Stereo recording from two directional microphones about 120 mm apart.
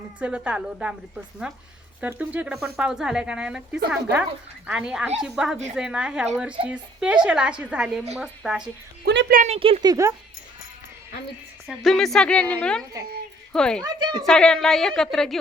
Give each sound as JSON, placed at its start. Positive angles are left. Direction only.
{"t": 0.2, "sound": "speech", "side_deg": -10}
{"t": 9.6, "sound": "speech", "side_deg": -50}
{"t": 9.8, "sound": "speech", "side_deg": -30}
{"t": 11.8, "sound": "speech", "side_deg": 0}
{"t": 13.8, "sound": "a woman's voice", "side_deg": -40}
{"t": 14.3, "sound": "a woman's voice", "side_deg": 5}